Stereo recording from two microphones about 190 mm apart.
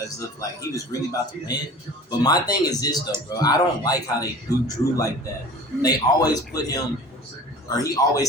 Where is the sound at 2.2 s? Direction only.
20° left (ahead or behind).